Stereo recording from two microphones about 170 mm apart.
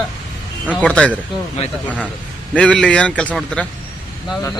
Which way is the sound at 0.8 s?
5° left (ahead or behind).